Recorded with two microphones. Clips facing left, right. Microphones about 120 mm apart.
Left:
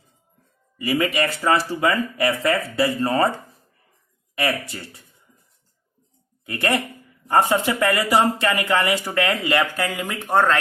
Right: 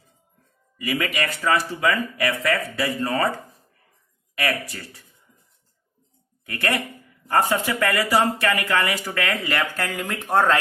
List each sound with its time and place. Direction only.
0.8 s speech: 30° left (ahead or behind)
6.4 s speech: 25° left (ahead or behind); by 10.6 s centre (ahead or behind)